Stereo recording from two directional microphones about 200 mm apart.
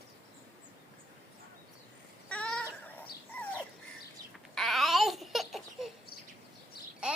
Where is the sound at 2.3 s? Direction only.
5° left (ahead or behind).